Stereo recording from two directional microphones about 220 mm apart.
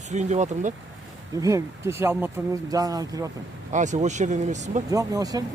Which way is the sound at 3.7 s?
35° right (ahead or behind).